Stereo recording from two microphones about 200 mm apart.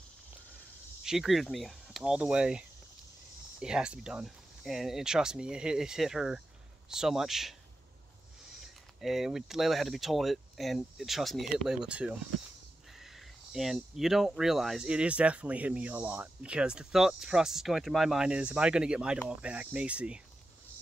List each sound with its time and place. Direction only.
1.0 s speech: centre (ahead or behind)
3.6 s speech: 5° right (ahead or behind)
8.5 s speech: centre (ahead or behind)